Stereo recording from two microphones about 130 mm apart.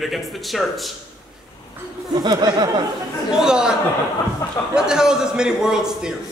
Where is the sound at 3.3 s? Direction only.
5° right (ahead or behind).